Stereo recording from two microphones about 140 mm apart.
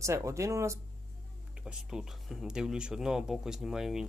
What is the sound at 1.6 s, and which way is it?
Speech, 5° right (ahead or behind).